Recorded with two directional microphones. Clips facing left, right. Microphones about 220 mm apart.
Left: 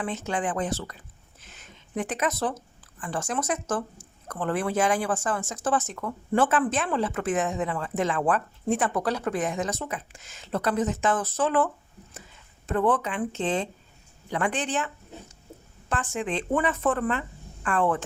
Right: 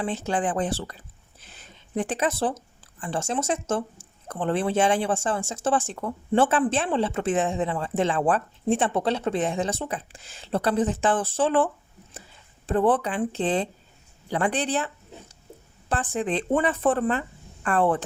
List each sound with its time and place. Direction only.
0.0 s speech: 35° right (ahead or behind)
15.9 s speech: 35° right (ahead or behind)